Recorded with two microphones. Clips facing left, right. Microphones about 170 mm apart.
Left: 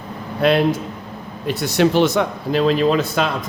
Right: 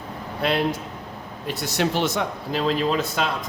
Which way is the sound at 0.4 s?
65° left (ahead or behind).